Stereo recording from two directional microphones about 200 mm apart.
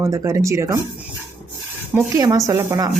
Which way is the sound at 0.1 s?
15° right (ahead or behind).